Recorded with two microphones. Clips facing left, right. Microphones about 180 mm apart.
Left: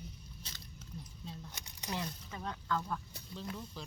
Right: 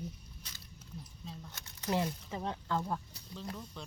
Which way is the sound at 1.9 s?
30° right (ahead or behind).